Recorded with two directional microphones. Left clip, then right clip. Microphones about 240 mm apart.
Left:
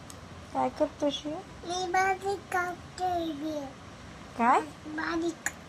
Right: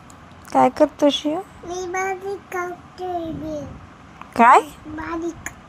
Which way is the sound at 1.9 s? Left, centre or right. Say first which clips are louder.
Right 2 dB; left.